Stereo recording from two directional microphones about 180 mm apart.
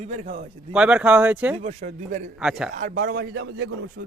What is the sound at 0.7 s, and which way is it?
Speech, 5° right (ahead or behind).